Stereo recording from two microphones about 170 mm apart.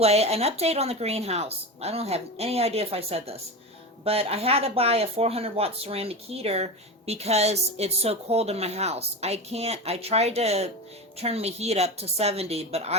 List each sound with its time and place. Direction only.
0.0 s speech: 40° right (ahead or behind)